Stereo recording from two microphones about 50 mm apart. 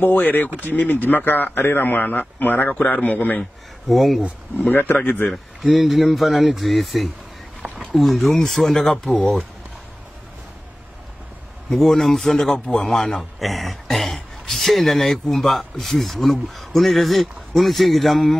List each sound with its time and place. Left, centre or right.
0.0 s speech: left
2.7 s speech: left
3.0 s speech: left
3.9 s a man's voice: centre
4.6 s speech: left
5.7 s a man's voice: centre
9.1 s speech: left
11.7 s a man's voice: centre